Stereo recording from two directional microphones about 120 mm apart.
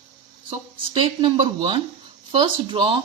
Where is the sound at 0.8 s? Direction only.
45° right (ahead or behind).